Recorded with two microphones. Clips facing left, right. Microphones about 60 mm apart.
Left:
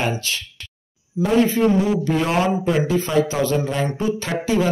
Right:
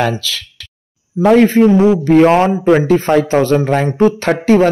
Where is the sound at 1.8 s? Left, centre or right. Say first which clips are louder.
Right 11 dB; right.